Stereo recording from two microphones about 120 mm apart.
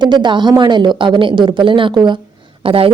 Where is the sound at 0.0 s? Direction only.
40° right (ahead or behind).